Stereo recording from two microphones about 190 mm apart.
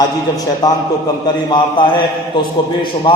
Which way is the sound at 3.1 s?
25° left (ahead or behind).